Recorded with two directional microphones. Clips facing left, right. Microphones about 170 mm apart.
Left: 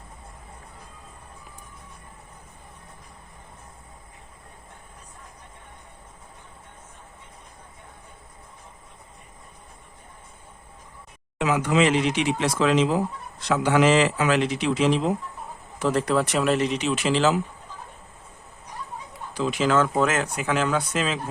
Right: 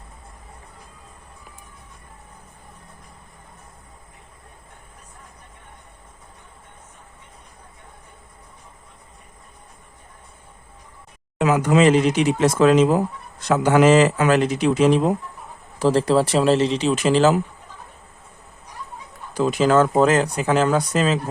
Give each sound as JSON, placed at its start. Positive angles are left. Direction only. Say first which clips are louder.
{"t": 11.3, "sound": "speech", "louder": "right 4 dB", "side_deg": -45}
{"t": 15.8, "sound": "speech", "louder": "right 5 dB", "side_deg": -30}
{"t": 19.3, "sound": "speech", "louder": "right 5 dB", "side_deg": -40}